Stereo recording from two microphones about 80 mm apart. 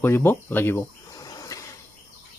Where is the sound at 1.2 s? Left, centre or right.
Left.